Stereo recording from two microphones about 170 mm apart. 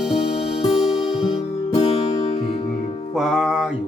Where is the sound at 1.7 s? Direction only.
30° left (ahead or behind).